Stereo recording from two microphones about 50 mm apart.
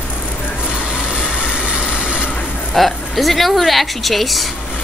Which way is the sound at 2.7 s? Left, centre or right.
Centre.